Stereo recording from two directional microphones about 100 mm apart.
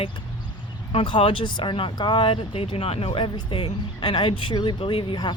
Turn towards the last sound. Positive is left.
turn(degrees=50)  # may be behind; listen again after turning